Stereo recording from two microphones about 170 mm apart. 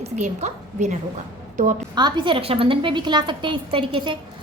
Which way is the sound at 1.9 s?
25° right (ahead or behind).